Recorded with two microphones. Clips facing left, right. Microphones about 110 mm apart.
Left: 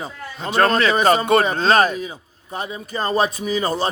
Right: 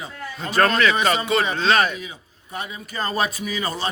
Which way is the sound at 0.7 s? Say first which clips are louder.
Left 3 dB; 35° left (ahead or behind).